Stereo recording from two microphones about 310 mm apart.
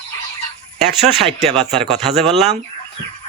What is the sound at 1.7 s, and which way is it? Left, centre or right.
Speech, centre.